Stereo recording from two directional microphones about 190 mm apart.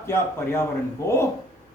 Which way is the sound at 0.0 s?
15° left (ahead or behind).